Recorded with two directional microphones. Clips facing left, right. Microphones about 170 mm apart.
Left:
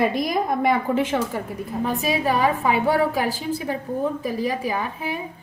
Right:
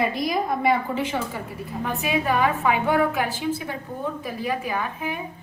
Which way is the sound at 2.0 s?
35° left (ahead or behind).